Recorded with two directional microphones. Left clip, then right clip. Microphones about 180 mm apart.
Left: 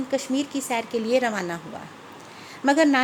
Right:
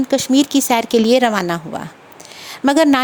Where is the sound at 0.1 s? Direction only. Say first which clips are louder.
Right 11 dB; 50° right (ahead or behind).